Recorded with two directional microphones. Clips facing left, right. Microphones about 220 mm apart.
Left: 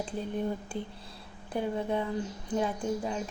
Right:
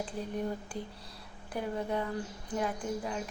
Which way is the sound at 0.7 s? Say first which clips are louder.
Left 3 dB; 25° left (ahead or behind).